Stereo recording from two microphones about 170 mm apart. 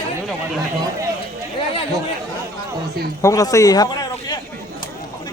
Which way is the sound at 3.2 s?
20° left (ahead or behind).